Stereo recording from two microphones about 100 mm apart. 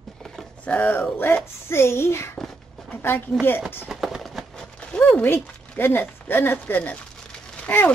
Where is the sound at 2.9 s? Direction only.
20° left (ahead or behind).